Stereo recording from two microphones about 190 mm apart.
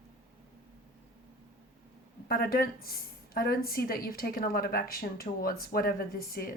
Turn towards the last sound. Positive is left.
turn(degrees=50)  # may be behind; listen again after turning